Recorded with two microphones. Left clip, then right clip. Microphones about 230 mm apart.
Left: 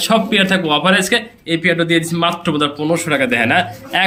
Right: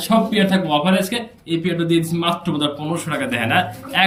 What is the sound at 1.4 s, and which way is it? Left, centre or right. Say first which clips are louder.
Speech: left 5 dB; left.